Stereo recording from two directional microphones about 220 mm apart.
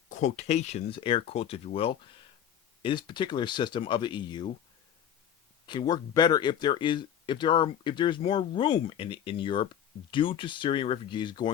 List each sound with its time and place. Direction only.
0.1 s speech: 30° left (ahead or behind)
5.6 s speech: 20° left (ahead or behind)